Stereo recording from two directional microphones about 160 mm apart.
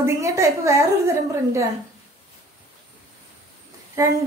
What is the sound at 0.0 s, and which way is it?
A woman's voice, 20° right (ahead or behind).